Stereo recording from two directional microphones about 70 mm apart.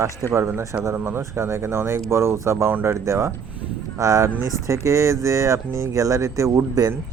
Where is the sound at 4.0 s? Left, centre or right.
Right.